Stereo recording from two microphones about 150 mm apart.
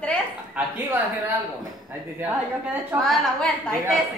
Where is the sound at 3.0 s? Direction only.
5° left (ahead or behind).